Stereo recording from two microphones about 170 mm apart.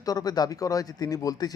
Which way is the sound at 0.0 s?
20° left (ahead or behind).